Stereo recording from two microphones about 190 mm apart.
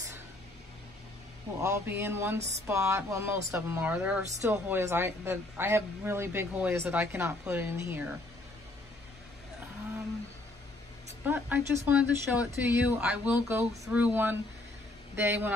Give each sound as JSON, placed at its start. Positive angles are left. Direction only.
{"t": 1.6, "sound": "speech", "side_deg": -15}
{"t": 11.2, "sound": "speech", "side_deg": -10}